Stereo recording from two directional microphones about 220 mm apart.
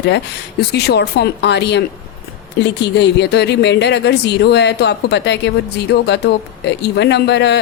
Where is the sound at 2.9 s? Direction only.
50° left (ahead or behind).